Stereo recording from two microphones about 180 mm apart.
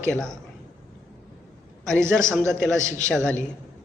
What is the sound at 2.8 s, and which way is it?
Speech, 40° left (ahead or behind).